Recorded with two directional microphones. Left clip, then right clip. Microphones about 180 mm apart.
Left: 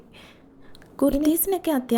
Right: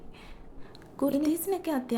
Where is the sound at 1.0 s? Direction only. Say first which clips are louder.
Left 6 dB; 30° left (ahead or behind).